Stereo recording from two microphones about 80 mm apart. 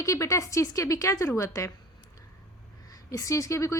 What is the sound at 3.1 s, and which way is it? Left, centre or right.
Speech, left.